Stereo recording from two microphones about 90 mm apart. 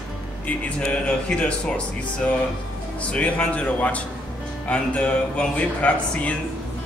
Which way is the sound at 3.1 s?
15° left (ahead or behind).